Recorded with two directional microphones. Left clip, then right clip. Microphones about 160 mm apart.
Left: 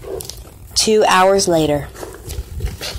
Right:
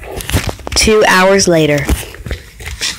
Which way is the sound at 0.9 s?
35° right (ahead or behind).